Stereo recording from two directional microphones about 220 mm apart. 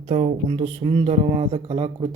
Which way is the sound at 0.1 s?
25° right (ahead or behind).